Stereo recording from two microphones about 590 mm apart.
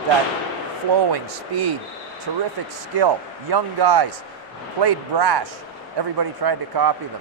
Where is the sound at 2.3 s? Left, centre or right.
Right.